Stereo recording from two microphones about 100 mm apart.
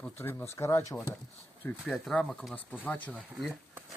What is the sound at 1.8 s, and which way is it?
Speech, 5° left (ahead or behind).